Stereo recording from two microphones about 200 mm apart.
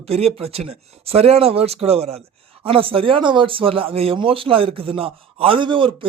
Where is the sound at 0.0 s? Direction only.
30° right (ahead or behind).